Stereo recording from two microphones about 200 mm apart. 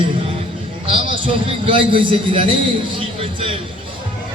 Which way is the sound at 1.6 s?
25° right (ahead or behind).